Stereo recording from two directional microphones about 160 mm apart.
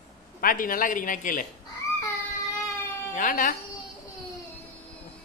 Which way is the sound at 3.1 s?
60° left (ahead or behind).